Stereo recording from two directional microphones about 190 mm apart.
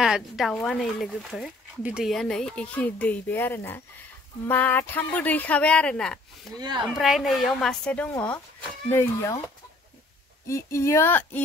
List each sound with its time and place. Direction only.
0.0 s speech: centre (ahead or behind); by 9.4 s 15° left (ahead or behind)
10.5 s speech: 15° left (ahead or behind)